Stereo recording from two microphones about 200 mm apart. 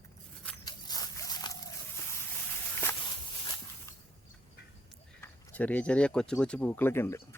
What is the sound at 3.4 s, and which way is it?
Walk, 20° left (ahead or behind).